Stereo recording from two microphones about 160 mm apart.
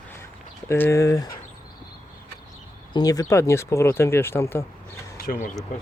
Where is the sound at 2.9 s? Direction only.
25° left (ahead or behind).